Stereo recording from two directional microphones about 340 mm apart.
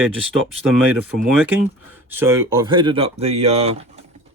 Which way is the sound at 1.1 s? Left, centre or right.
Centre.